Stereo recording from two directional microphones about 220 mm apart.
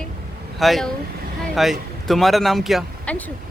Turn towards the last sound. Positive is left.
turn(degrees=0)  # may be behind; listen again after turning